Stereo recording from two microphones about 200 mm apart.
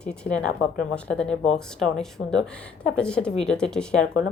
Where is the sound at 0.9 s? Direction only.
5° left (ahead or behind).